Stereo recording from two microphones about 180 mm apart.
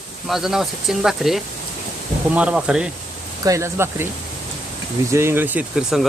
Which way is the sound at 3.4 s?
15° right (ahead or behind).